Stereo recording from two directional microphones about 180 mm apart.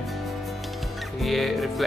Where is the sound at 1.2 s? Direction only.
Centre (ahead or behind).